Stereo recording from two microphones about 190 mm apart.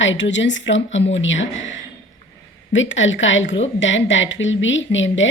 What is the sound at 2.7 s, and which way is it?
A woman's voice, 85° left.